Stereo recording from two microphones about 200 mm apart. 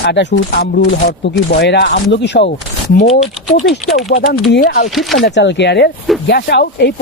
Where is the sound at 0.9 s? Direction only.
50° left (ahead or behind).